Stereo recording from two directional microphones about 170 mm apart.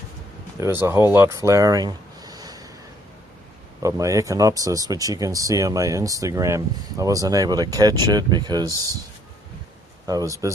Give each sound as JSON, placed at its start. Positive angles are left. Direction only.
{"t": 0.6, "sound": "speech", "side_deg": -15}
{"t": 3.8, "sound": "speech", "side_deg": -20}
{"t": 10.1, "sound": "speech", "side_deg": -20}